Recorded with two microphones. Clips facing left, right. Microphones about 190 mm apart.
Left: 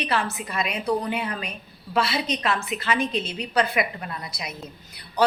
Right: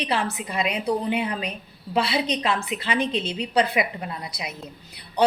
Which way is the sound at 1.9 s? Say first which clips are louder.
Right 1 dB; 30° right (ahead or behind).